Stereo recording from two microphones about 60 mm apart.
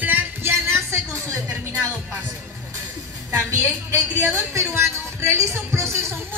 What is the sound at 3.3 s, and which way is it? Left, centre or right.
A woman's voice, right.